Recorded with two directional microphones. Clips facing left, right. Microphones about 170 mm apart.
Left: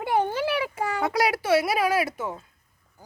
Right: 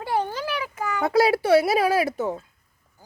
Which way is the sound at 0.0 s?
20° left (ahead or behind).